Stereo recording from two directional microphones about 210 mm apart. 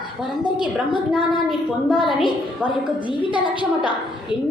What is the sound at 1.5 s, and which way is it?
Speech, 25° left (ahead or behind).